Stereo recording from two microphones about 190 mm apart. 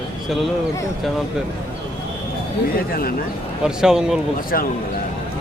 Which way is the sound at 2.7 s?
50° left (ahead or behind).